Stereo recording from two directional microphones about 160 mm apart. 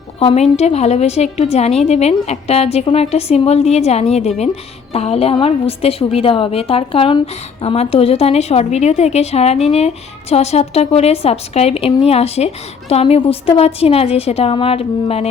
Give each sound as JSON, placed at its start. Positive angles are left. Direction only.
{"t": 0.2, "sound": "a woman's voice", "side_deg": 35}